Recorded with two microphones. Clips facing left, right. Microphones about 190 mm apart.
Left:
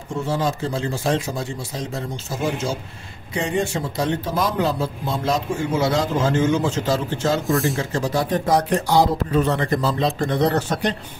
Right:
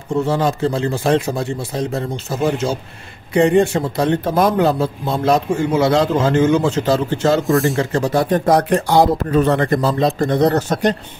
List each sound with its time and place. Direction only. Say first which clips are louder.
0.3 s a man's voice: right 3 dB; 65° right (ahead or behind)
3.3 s a man's voice: right 9 dB; 60° right (ahead or behind)
7.4 s speech: right 5 dB; centre (ahead or behind)
7.7 s a man's voice: right 5 dB; 60° right (ahead or behind); by 11.0 s 45° right (ahead or behind)